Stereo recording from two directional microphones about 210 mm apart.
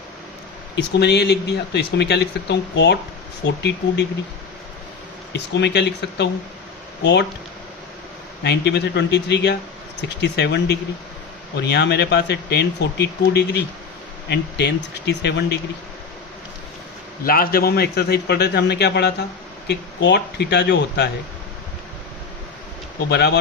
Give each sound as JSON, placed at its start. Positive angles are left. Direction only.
{"t": 0.8, "sound": "speech", "side_deg": 55}
{"t": 5.5, "sound": "speech", "side_deg": 55}
{"t": 8.4, "sound": "speech", "side_deg": 55}
{"t": 17.2, "sound": "speech", "side_deg": 45}
{"t": 23.0, "sound": "speech", "side_deg": 50}